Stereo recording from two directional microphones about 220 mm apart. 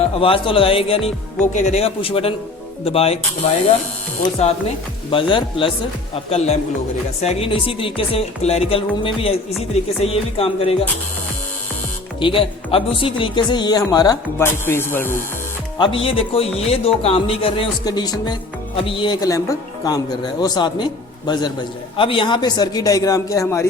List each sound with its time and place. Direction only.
0.0 s speech: 25° left (ahead or behind)
4.4 s speech: 30° left (ahead or behind)
12.2 s speech: 25° left (ahead or behind)
15.8 s speech: 25° left (ahead or behind)